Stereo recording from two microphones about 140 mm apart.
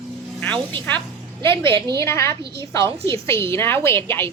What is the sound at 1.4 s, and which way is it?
Speech, 20° left (ahead or behind).